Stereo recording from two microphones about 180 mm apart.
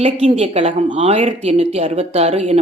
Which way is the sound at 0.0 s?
40° right (ahead or behind).